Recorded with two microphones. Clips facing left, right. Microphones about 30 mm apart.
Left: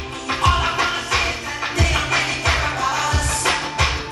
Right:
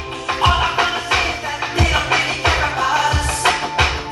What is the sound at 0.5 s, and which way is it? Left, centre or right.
Music, right.